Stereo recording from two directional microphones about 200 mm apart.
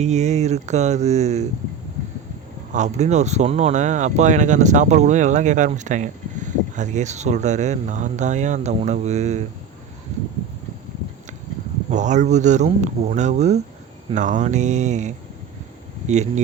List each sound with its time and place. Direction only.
0.0 s speech: 35° right (ahead or behind)
2.7 s speech: 35° right (ahead or behind)
11.9 s speech: 35° right (ahead or behind)